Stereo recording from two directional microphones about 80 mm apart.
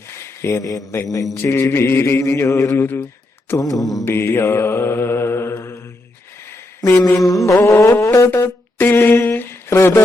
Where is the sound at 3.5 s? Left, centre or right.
Left.